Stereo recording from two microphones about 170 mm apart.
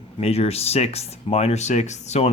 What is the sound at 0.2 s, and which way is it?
Speech, 35° left (ahead or behind).